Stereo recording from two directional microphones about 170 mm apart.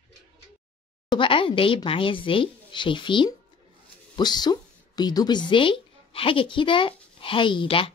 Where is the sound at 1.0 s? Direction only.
30° left (ahead or behind).